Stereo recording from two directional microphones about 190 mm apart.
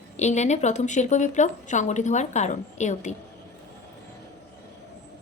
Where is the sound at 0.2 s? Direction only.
40° left (ahead or behind).